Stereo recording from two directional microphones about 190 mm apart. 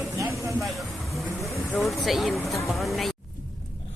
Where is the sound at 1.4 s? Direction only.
15° left (ahead or behind).